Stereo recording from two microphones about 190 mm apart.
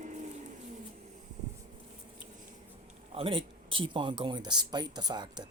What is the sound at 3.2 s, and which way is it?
Speech, 30° right (ahead or behind).